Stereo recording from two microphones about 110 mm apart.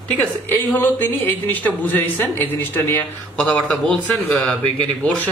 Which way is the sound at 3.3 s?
5° left (ahead or behind).